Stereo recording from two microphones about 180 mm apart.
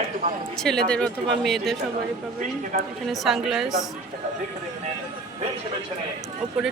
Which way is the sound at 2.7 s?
50° right (ahead or behind).